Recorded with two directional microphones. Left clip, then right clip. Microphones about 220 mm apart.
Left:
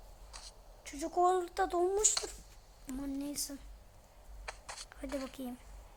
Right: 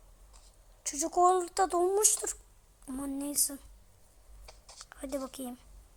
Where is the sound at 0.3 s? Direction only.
25° left (ahead or behind).